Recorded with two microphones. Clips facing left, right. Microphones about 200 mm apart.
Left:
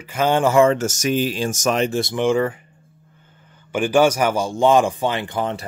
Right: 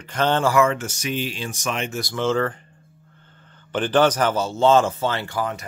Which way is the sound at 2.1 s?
15° left (ahead or behind).